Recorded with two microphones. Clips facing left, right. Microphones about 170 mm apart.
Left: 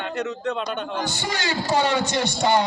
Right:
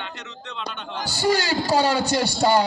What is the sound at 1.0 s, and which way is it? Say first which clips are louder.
A man's voice: right 5 dB; 35° right (ahead or behind).